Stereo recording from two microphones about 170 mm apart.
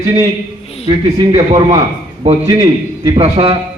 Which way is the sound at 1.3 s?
30° right (ahead or behind).